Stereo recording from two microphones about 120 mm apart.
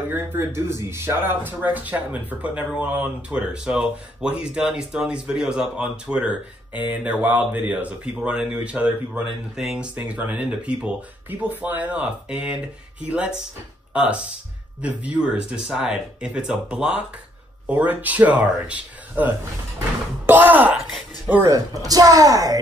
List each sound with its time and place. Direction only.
0.1 s speech: 20° right (ahead or behind)
21.5 s speech: 30° right (ahead or behind)